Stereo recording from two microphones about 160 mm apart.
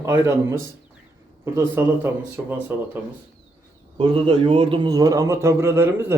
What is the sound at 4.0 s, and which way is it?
A man's voice, 35° right (ahead or behind).